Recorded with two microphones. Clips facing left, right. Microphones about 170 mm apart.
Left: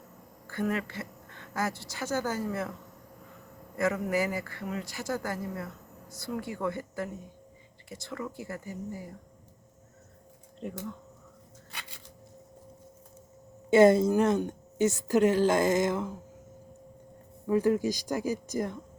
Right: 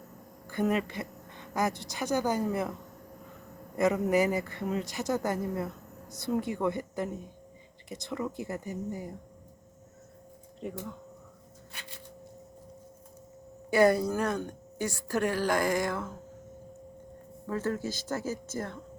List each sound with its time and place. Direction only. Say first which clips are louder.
0.4 s a woman's voice: right 3 dB; 15° right (ahead or behind)
3.8 s a man's voice: right 3 dB; 20° right (ahead or behind)
10.6 s speech: even; centre (ahead or behind)
13.7 s a woman's voice: left 4 dB; 25° left (ahead or behind)
17.4 s speech: left 7 dB; 15° left (ahead or behind)